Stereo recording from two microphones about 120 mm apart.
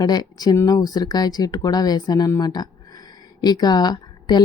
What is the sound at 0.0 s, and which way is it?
Speech, 35° left (ahead or behind).